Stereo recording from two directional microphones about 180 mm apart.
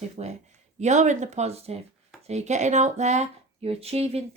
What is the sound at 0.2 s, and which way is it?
Speech, 40° right (ahead or behind).